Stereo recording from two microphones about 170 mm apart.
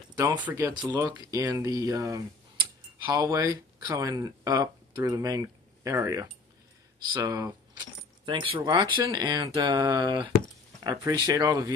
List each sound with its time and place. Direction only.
0.4 s speech: 15° right (ahead or behind)